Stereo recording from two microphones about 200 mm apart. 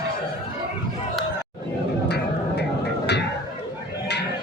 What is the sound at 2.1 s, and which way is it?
Music, 55° left (ahead or behind).